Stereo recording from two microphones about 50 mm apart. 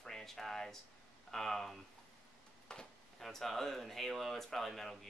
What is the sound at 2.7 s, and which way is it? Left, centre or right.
Speech, centre.